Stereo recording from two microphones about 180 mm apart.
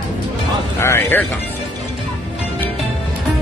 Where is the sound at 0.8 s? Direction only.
15° left (ahead or behind).